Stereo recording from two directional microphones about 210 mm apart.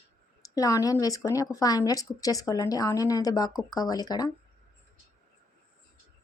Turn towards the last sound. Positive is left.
turn(degrees=20)  # may be behind; listen again after turning